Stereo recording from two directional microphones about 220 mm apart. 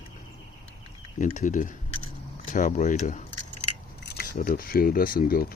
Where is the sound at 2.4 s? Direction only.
35° left (ahead or behind).